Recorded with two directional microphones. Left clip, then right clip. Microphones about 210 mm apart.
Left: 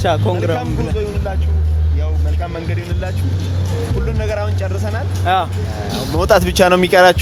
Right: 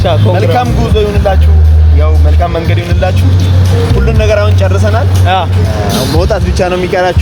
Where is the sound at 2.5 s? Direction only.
10° right (ahead or behind).